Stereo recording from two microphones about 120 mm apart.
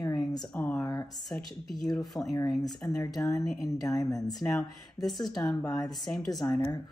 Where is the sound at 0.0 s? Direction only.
35° left (ahead or behind).